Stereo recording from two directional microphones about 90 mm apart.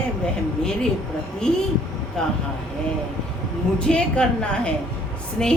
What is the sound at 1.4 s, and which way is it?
Speech, 10° left (ahead or behind).